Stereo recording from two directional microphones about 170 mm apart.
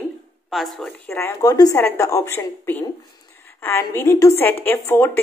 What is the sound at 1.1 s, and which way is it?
A woman's voice, 15° left (ahead or behind).